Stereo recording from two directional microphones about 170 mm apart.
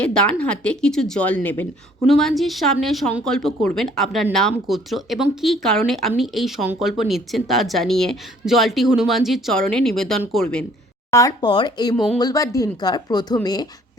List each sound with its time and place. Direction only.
0.0 s speech: 5° left (ahead or behind)
11.1 s speech: 20° left (ahead or behind)